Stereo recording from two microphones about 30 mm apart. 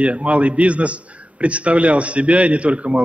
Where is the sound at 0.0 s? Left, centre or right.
Right.